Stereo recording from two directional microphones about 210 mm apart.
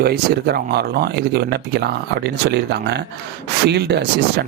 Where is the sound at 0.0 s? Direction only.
50° right (ahead or behind).